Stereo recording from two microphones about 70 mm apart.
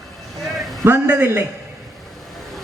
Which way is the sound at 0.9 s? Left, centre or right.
Right.